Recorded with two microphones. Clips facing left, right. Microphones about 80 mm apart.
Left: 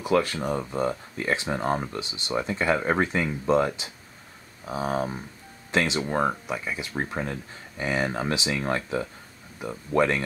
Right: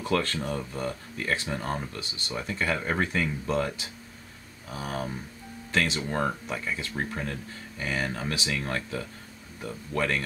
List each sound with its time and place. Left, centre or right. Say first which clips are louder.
0.0 s speech: left 4 dB; centre